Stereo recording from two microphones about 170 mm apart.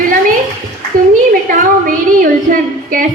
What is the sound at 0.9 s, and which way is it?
A woman's voice, 55° right (ahead or behind).